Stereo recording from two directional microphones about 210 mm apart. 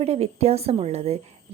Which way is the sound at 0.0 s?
30° right (ahead or behind).